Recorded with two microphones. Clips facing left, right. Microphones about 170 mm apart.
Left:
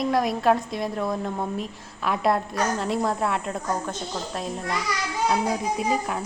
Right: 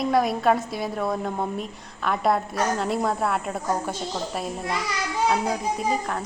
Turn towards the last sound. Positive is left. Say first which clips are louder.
# left 1 dB
turn(degrees=5)  # may be behind; listen again after turning